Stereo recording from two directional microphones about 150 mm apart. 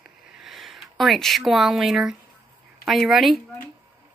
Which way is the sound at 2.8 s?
Centre (ahead or behind).